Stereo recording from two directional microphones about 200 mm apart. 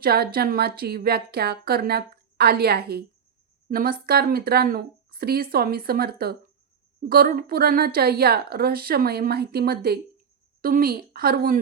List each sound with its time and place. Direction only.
0.0 s a woman's voice: 50° right (ahead or behind)